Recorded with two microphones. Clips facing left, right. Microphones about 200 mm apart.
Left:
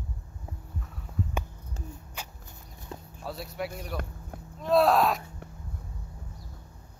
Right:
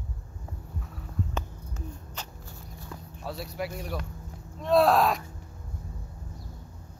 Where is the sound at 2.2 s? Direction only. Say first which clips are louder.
Right 1 dB; 20° left (ahead or behind).